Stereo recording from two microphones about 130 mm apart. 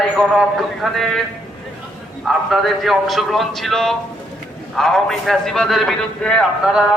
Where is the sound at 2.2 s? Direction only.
Centre (ahead or behind).